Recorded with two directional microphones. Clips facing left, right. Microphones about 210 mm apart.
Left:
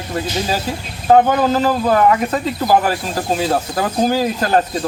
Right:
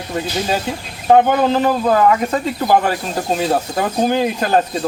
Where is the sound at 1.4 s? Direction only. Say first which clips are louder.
Even; centre (ahead or behind).